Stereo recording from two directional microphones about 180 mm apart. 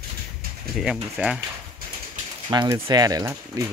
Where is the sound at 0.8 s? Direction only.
5° right (ahead or behind).